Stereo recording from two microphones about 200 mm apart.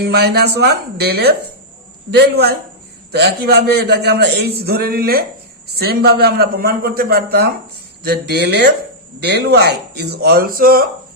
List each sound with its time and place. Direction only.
0.0 s a man's voice: 55° right (ahead or behind)